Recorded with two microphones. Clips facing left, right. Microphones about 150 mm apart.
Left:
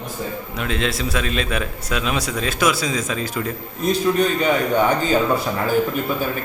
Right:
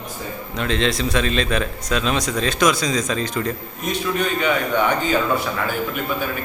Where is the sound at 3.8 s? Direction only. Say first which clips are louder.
Left 5 dB; 35° left (ahead or behind).